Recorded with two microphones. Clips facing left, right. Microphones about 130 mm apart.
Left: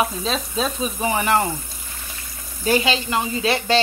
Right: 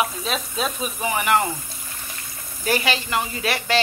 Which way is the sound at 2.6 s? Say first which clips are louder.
Left 3 dB; 25° left (ahead or behind).